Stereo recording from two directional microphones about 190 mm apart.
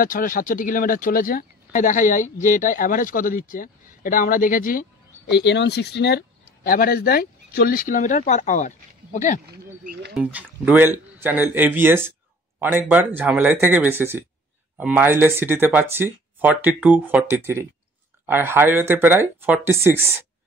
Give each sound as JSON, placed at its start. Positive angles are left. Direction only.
{"t": 0.0, "sound": "speech", "side_deg": 45}
{"t": 9.5, "sound": "speech", "side_deg": -60}
{"t": 10.1, "sound": "speech", "side_deg": -10}